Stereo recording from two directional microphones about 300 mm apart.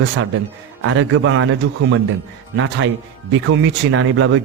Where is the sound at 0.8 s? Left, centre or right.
Right.